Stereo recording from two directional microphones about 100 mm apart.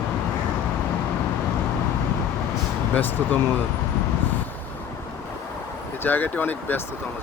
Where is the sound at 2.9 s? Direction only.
15° left (ahead or behind).